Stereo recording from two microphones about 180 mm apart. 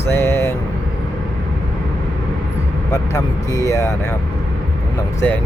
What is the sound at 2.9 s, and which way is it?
Speech, 15° left (ahead or behind).